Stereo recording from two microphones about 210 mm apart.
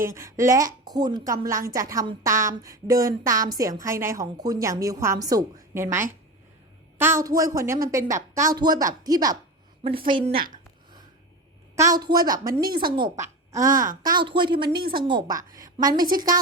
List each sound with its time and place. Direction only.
0.0 s a woman's voice: 15° right (ahead or behind)
10.2 s a woman's voice: 45° right (ahead or behind)
11.8 s a woman's voice: 20° right (ahead or behind)
16.0 s a woman's voice: 40° right (ahead or behind)